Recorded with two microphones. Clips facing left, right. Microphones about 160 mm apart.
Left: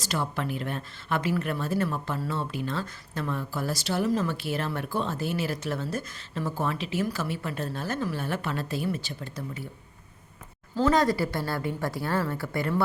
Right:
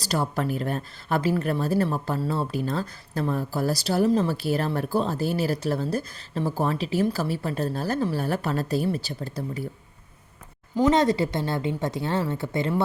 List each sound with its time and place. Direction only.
0.0 s speech: 40° right (ahead or behind)
10.8 s a woman's voice: 20° right (ahead or behind)